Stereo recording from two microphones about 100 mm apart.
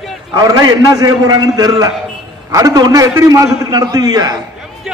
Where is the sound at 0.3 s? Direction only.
35° right (ahead or behind).